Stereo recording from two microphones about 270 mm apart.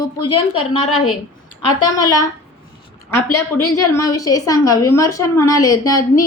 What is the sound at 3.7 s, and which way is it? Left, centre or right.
A woman's voice, centre.